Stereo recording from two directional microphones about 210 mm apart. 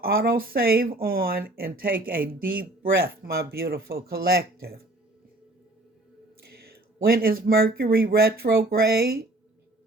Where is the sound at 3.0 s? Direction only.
50° right (ahead or behind).